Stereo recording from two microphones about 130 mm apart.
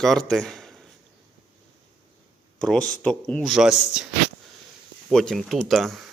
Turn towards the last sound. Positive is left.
turn(degrees=0)  # may be behind; listen again after turning